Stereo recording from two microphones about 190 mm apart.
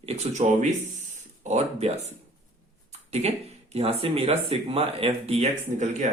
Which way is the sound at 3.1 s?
35° right (ahead or behind).